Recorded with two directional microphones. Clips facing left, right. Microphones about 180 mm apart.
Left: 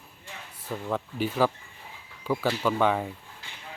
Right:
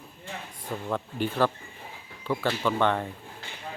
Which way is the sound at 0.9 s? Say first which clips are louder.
Even; 5° left (ahead or behind).